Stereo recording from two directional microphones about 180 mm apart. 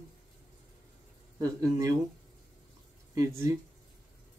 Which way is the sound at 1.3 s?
20° right (ahead or behind).